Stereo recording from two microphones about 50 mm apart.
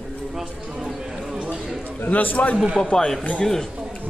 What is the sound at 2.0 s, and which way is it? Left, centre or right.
Speech, left.